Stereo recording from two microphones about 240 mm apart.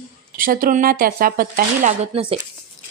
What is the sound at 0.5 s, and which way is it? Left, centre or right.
Speech, right.